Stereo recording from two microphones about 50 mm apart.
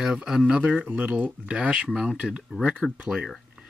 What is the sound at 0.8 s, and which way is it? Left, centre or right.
Speech, right.